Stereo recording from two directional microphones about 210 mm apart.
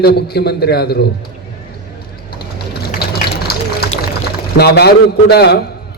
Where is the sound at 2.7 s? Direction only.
50° left (ahead or behind).